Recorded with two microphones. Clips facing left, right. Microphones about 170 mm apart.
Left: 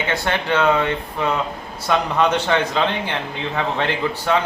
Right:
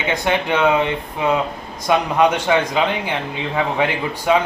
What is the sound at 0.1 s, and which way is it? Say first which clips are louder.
A man's voice: right 3 dB; 15° right (ahead or behind).